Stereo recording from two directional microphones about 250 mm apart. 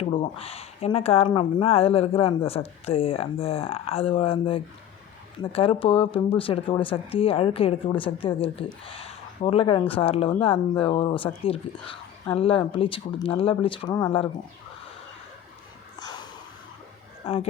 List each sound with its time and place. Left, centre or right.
0.1 s speech: left